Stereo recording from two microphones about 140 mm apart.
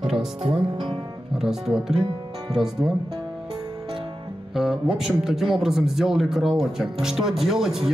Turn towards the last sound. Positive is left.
turn(degrees=-5)  # may be behind; listen again after turning